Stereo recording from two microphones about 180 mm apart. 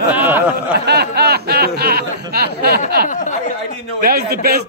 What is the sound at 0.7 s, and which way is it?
Speech, 65° right (ahead or behind).